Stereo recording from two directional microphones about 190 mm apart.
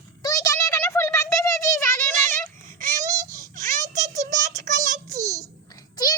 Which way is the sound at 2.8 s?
40° right (ahead or behind).